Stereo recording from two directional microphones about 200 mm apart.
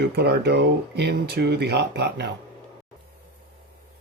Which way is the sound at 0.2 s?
55° right (ahead or behind).